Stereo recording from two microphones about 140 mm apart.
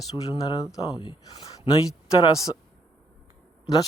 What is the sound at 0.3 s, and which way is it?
Speech, 30° left (ahead or behind).